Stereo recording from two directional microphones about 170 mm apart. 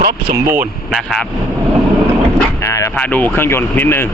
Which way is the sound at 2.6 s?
15° left (ahead or behind).